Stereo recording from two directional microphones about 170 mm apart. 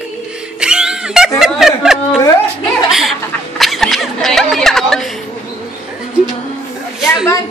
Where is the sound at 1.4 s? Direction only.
Centre (ahead or behind).